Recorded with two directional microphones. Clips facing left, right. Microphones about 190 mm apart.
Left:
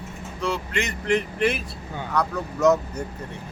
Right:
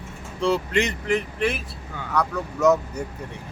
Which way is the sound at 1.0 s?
Centre (ahead or behind).